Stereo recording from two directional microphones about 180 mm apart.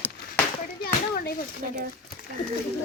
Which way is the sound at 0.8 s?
60° left (ahead or behind).